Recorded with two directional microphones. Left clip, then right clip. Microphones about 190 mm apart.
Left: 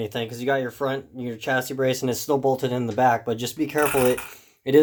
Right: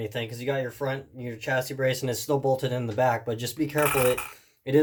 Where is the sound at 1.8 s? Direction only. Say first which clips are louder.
Left 3 dB; 30° left (ahead or behind).